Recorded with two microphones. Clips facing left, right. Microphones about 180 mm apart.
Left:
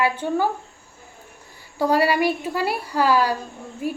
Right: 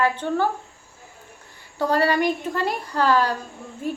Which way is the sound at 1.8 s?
10° left (ahead or behind).